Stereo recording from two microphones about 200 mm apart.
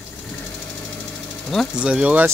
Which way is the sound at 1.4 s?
Centre (ahead or behind).